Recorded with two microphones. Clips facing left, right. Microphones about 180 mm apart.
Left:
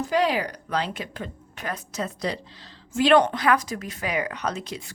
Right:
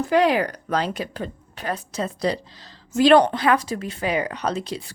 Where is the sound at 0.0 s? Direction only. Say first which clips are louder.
Right 4 dB; 60° right (ahead or behind).